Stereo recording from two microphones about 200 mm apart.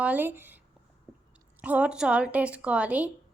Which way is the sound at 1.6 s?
5° right (ahead or behind).